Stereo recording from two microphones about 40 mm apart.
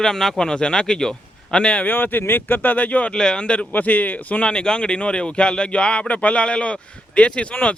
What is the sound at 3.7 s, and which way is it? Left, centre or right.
Speech, left.